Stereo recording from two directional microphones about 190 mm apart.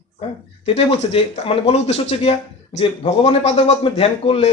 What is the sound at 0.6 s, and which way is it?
Speech, 30° left (ahead or behind).